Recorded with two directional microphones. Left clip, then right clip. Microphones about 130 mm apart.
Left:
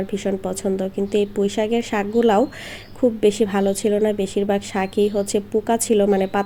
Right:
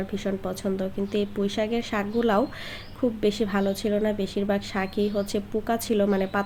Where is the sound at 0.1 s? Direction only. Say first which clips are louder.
Left 6 dB; 15° left (ahead or behind).